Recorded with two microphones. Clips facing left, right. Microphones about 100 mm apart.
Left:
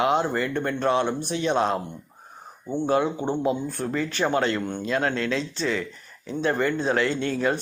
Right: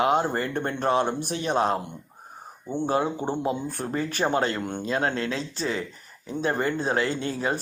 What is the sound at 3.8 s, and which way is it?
Speech, 35° right (ahead or behind).